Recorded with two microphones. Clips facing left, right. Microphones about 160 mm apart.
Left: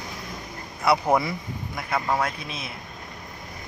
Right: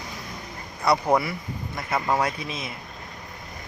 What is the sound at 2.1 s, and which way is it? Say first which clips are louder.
Speech: right 2 dB; 10° right (ahead or behind).